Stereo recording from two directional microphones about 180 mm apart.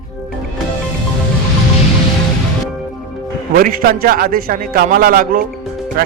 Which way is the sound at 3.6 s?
55° right (ahead or behind).